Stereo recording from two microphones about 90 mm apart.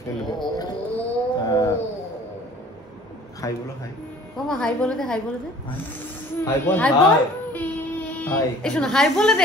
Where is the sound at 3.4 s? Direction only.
40° left (ahead or behind).